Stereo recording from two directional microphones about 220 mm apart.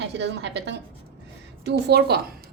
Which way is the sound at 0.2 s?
50° right (ahead or behind).